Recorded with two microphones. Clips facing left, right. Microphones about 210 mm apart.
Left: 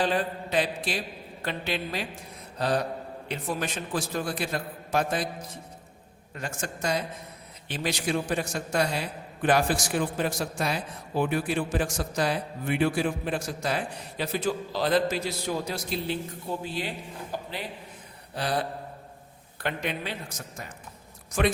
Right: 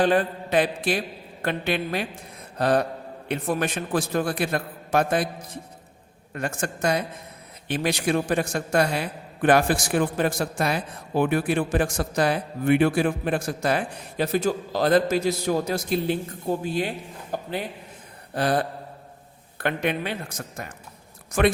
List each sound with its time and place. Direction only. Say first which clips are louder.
0.0 s a man's voice: right 6 dB; 55° right (ahead or behind)
6.3 s a man's voice: right 6 dB; 55° right (ahead or behind)